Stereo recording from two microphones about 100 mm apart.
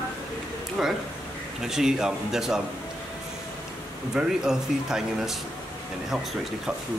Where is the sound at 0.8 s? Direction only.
Centre (ahead or behind).